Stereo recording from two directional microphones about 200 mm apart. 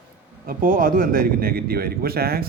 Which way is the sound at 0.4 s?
45° right (ahead or behind).